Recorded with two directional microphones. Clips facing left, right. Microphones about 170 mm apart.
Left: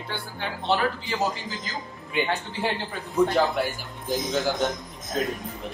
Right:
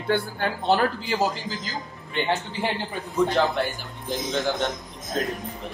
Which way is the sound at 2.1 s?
10° left (ahead or behind).